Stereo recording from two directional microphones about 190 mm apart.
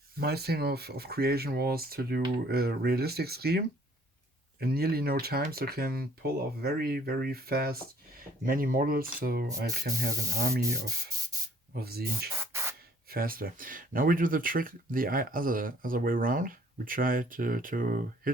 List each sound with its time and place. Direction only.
0.2 s speech: 55° right (ahead or behind)
4.6 s speech: 55° right (ahead or behind)
11.7 s speech: 55° right (ahead or behind)
12.4 s spray: 15° right (ahead or behind)
13.1 s speech: 50° right (ahead or behind)